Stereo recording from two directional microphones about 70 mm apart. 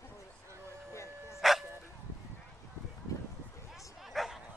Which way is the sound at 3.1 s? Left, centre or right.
Left.